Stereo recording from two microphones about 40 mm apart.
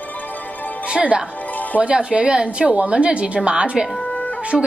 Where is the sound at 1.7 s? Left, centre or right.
Left.